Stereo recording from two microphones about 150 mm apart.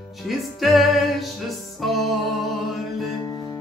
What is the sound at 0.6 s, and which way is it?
Music, centre (ahead or behind).